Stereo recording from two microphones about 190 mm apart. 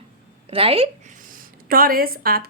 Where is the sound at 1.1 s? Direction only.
45° right (ahead or behind).